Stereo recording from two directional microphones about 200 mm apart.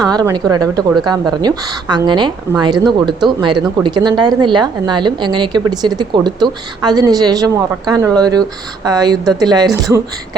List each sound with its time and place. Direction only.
0.0 s speech: 20° right (ahead or behind)